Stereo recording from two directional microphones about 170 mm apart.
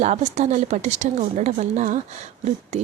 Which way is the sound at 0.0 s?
45° right (ahead or behind).